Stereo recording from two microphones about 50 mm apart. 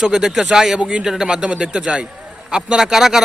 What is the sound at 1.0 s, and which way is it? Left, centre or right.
Speech, centre.